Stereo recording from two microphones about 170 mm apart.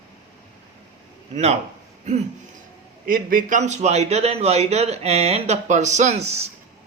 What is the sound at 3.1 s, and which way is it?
A man's voice, 55° right (ahead or behind).